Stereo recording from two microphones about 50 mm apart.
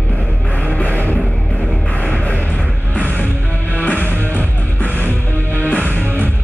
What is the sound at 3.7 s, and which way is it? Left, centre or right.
Music, left.